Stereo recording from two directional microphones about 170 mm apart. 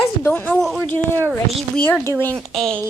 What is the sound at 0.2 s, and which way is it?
A child's voice, 10° left (ahead or behind).